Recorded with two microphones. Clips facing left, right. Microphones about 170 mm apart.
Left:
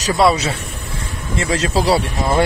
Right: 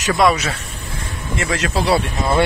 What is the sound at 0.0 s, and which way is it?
Speech, 30° left (ahead or behind).